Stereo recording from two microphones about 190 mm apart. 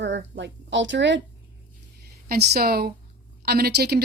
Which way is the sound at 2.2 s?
55° right (ahead or behind).